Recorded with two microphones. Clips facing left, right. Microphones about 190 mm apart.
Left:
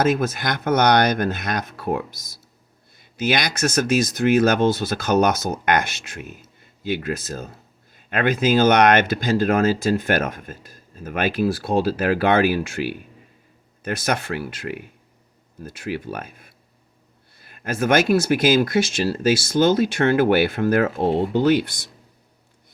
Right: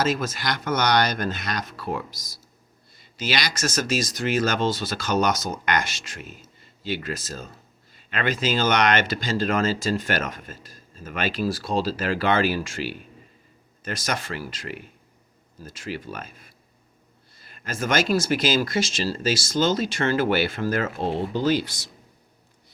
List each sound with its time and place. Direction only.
0.0 s speech: 55° left (ahead or behind)